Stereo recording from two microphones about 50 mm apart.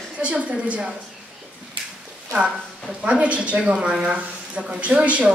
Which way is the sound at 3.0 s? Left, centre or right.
Right.